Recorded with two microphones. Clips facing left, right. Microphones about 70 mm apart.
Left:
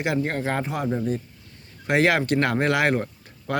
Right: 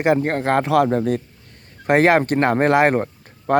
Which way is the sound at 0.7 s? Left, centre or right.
Right.